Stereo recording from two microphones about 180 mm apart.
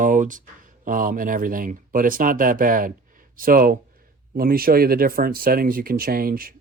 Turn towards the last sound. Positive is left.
turn(degrees=-55)  # may be behind; listen again after turning